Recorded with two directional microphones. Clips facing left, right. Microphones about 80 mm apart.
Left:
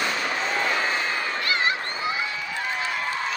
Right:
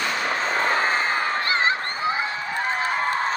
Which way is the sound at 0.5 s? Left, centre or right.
Right.